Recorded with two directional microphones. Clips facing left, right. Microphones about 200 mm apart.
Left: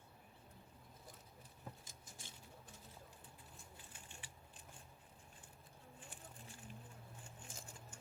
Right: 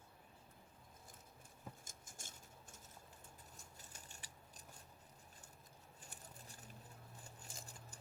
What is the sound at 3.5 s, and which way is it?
Scissors, 40° right (ahead or behind).